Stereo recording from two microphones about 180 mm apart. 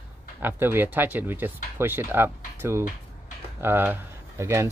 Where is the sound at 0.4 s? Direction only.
10° right (ahead or behind).